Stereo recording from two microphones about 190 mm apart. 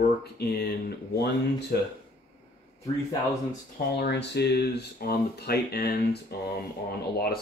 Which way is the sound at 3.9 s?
65° left (ahead or behind).